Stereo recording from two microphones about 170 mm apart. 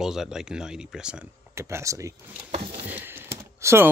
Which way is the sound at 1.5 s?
15° right (ahead or behind).